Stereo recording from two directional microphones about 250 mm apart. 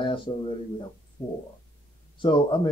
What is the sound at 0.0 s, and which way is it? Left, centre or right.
Speech, centre.